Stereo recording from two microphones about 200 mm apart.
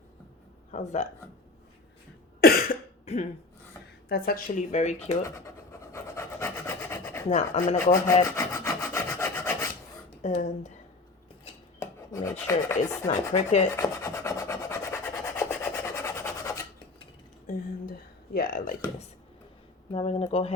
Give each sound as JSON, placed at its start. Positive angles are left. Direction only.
{"t": 0.7, "sound": "speech", "side_deg": 35}
{"t": 2.4, "sound": "cough", "side_deg": 50}
{"t": 3.1, "sound": "speech", "side_deg": 30}
{"t": 4.1, "sound": "speech", "side_deg": 45}
{"t": 5.9, "sound": "filing", "side_deg": 15}
{"t": 7.3, "sound": "speech", "side_deg": 30}
{"t": 7.9, "sound": "rub", "side_deg": 15}
{"t": 10.2, "sound": "speech", "side_deg": 35}
{"t": 11.8, "sound": "filing", "side_deg": 15}
{"t": 13.1, "sound": "speech", "side_deg": 35}
{"t": 13.7, "sound": "rub", "side_deg": 15}
{"t": 17.4, "sound": "speech", "side_deg": 45}
{"t": 19.9, "sound": "speech", "side_deg": 30}